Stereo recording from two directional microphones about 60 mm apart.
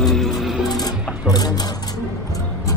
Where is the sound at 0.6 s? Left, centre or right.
Left.